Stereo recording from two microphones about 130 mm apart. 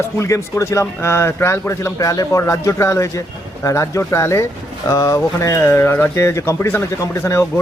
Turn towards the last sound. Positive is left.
turn(degrees=20)  # may be behind; listen again after turning